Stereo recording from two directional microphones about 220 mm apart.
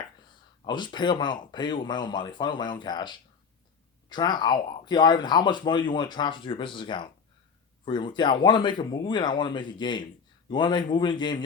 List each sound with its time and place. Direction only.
0.6 s speech: 20° left (ahead or behind)